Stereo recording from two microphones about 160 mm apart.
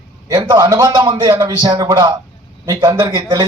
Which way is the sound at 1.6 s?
30° right (ahead or behind).